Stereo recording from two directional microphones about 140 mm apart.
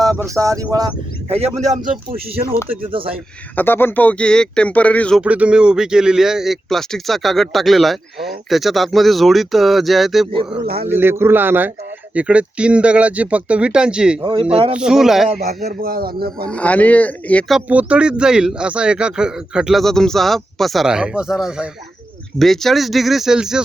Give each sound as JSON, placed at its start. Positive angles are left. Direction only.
{"t": 0.0, "sound": "speech", "side_deg": -25}
{"t": 1.3, "sound": "a man's voice", "side_deg": -45}
{"t": 1.8, "sound": "speech", "side_deg": -90}
{"t": 3.0, "sound": "speech", "side_deg": -40}
{"t": 3.5, "sound": "speech", "side_deg": 15}
{"t": 5.2, "sound": "speech", "side_deg": -10}
{"t": 10.8, "sound": "speech", "side_deg": -15}
{"t": 15.4, "sound": "speech", "side_deg": -90}
{"t": 16.5, "sound": "speech", "side_deg": 10}
{"t": 17.5, "sound": "speech", "side_deg": -10}